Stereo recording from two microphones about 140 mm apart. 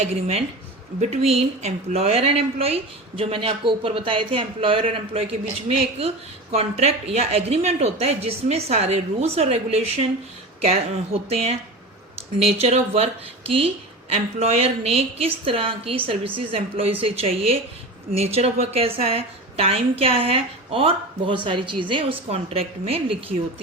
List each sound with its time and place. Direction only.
0.0 s a woman's voice: 50° right (ahead or behind)